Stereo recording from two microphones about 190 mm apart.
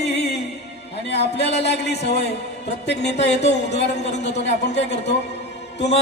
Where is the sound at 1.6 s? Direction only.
60° left (ahead or behind).